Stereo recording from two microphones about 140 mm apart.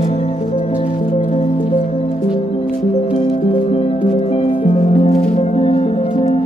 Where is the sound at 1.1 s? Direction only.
45° left (ahead or behind).